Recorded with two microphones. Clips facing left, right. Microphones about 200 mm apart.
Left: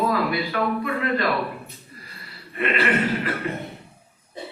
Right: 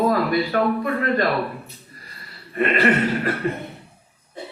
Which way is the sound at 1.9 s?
40° right (ahead or behind).